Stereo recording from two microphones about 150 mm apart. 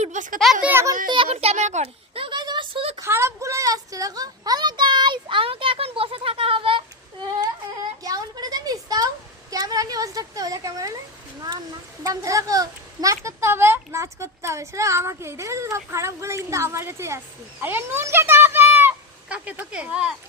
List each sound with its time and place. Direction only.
0.0 s speech: 55° right (ahead or behind)
0.3 s speech: centre (ahead or behind)
0.7 s a child's voice: 15° right (ahead or behind)
1.1 s a child's voice: 40° right (ahead or behind)
3.0 s a sound: 20° right (ahead or behind); by 6.8 s 35° right (ahead or behind)
8.0 s a sound: 25° right (ahead or behind)
9.5 s a child's voice: 25° right (ahead or behind); by 20.1 s 5° right (ahead or behind)